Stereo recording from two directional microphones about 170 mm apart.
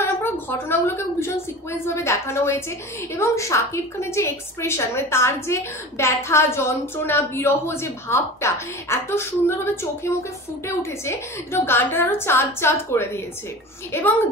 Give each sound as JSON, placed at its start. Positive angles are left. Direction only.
{"t": 0.0, "sound": "a woman's voice", "side_deg": 10}
{"t": 10.8, "sound": "a woman's voice", "side_deg": 15}